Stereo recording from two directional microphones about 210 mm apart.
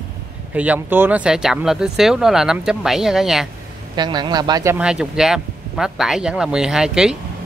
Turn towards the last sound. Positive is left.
turn(degrees=-5)  # may be behind; listen again after turning